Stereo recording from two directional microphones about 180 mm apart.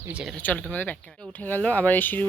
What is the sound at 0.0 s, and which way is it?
Speech, 5° right (ahead or behind).